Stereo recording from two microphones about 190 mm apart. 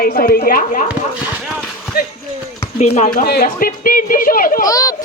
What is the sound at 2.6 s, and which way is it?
Speech, 35° left (ahead or behind).